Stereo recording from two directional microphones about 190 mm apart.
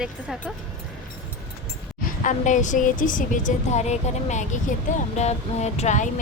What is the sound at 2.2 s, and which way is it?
Speech, 40° left (ahead or behind).